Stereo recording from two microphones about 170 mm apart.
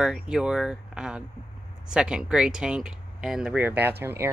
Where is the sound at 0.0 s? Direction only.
5° right (ahead or behind).